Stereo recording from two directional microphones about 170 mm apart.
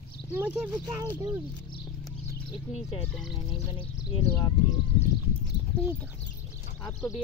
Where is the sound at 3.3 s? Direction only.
30° left (ahead or behind).